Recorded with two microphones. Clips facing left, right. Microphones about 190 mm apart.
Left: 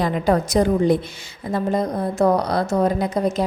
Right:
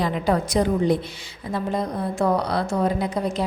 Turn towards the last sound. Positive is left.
turn(degrees=45)  # may be behind; listen again after turning